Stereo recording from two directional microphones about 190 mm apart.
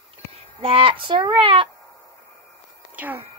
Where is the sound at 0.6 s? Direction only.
30° right (ahead or behind).